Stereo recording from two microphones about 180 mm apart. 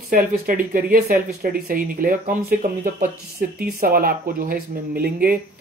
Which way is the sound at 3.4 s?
55° right (ahead or behind).